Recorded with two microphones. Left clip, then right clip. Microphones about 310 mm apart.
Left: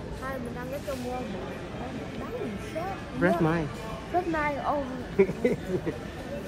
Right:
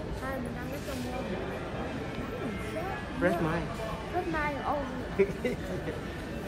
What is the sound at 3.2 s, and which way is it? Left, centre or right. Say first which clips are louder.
Speech: left 4 dB; left.